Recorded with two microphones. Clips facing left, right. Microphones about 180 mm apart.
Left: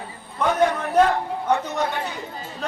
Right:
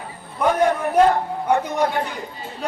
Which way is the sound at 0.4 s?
10° right (ahead or behind).